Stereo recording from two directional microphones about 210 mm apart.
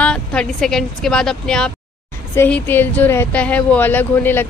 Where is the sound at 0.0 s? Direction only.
5° left (ahead or behind).